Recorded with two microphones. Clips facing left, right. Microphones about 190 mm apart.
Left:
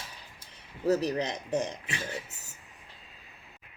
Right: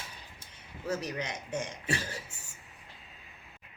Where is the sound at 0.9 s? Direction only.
35° left (ahead or behind).